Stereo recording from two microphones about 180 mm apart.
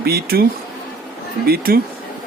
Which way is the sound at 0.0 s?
60° right (ahead or behind).